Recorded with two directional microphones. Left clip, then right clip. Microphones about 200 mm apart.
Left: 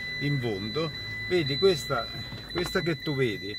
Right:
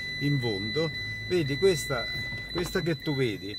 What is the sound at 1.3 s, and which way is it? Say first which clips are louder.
Speech: left 1 dB; 15° right (ahead or behind).